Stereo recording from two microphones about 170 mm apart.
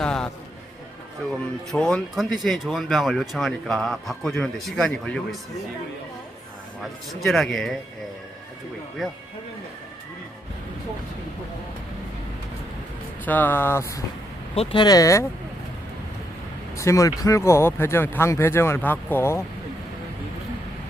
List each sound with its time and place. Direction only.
0.0 s a sound: 5° left (ahead or behind)
1.2 s speech: 5° left (ahead or behind)
7.1 s speech: centre (ahead or behind)
13.2 s speech: 10° left (ahead or behind)
14.5 s speech: 35° left (ahead or behind); by 15.3 s 20° left (ahead or behind)
16.7 s speech: 15° left (ahead or behind)